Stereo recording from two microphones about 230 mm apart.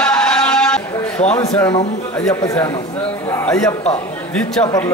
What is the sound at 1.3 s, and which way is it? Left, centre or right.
Speech, centre.